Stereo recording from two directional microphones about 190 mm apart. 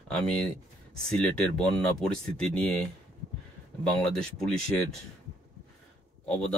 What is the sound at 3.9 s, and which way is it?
Speech, 5° left (ahead or behind).